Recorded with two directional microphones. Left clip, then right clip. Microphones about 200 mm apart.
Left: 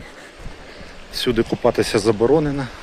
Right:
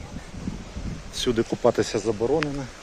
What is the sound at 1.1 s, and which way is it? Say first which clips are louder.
Speech: left 5 dB; 15° right (ahead or behind).